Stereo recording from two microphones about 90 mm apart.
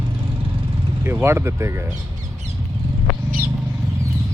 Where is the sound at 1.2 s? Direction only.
30° right (ahead or behind).